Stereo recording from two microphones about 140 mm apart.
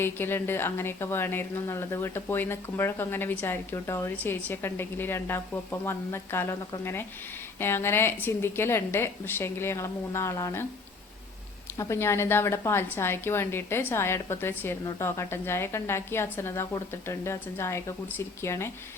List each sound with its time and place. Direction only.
0.0 s a woman's voice: 15° left (ahead or behind)
11.8 s a woman's voice: 20° left (ahead or behind)